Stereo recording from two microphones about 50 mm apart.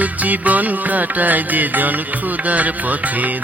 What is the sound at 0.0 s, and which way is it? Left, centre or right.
Music, right.